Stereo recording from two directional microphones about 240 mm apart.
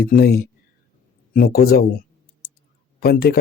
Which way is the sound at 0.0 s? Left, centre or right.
Left.